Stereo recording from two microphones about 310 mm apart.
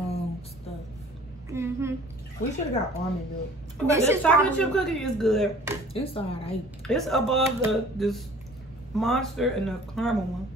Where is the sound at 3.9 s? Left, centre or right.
Centre.